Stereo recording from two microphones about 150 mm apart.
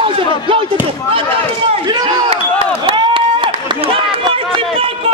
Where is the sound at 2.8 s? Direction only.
35° right (ahead or behind).